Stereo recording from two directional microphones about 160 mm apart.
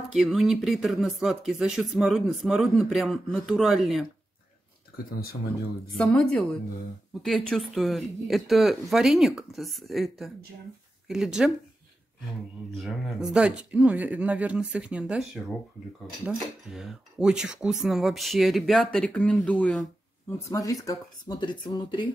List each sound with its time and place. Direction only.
0.1 s speech: centre (ahead or behind)
5.9 s speech: 5° left (ahead or behind)
12.7 s speech: centre (ahead or behind)
16.3 s speech: centre (ahead or behind)
19.8 s speech: 15° left (ahead or behind)